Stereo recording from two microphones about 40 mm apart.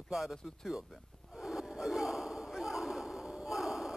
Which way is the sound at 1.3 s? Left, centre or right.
Centre.